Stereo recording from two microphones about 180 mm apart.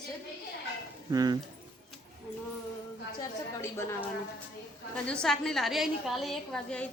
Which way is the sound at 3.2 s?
15° left (ahead or behind).